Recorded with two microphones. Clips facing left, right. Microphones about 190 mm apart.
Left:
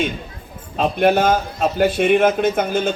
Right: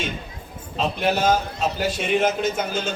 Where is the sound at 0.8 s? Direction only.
55° left (ahead or behind).